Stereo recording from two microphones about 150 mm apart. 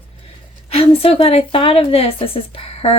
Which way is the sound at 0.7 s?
40° left (ahead or behind).